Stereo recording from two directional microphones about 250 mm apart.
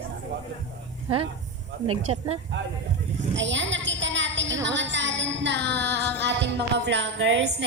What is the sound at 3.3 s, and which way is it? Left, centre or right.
A woman's voice, right.